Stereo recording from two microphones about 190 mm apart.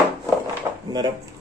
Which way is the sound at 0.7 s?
20° right (ahead or behind).